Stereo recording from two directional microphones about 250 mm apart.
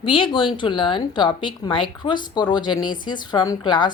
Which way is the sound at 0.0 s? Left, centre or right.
Left.